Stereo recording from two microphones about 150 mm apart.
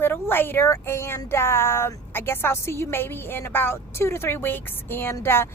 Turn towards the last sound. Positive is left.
turn(degrees=15)  # may be behind; listen again after turning